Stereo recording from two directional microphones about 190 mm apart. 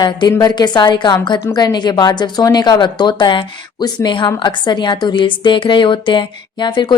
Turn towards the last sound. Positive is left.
turn(degrees=25)  # may be behind; listen again after turning